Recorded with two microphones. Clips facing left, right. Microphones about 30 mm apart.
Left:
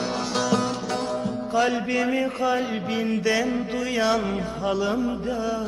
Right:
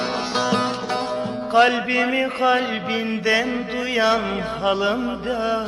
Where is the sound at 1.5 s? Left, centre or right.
Right.